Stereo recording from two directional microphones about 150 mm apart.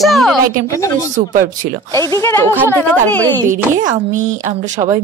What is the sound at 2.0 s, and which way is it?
Speech, 20° left (ahead or behind).